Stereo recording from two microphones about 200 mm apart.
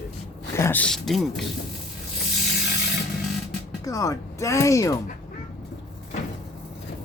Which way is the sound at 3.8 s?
15° left (ahead or behind).